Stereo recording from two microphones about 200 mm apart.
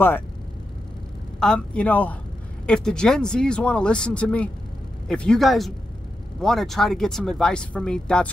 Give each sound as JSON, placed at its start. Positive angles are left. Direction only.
{"t": 1.4, "sound": "speech", "side_deg": 5}